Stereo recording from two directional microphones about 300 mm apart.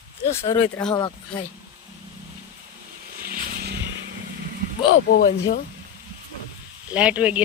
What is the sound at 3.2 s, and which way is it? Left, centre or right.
Vehicle, right.